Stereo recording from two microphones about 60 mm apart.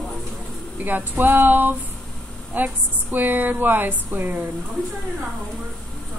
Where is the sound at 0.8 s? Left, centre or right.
Right.